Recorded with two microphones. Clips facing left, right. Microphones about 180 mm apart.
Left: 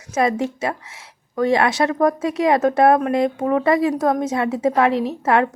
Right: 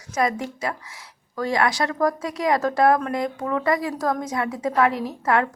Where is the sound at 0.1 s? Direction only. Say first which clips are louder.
Left 4 dB; 25° left (ahead or behind).